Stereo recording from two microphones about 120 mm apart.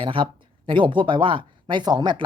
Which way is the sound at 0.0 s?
45° right (ahead or behind).